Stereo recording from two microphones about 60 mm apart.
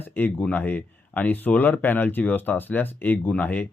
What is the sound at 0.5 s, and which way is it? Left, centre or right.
Speech, left.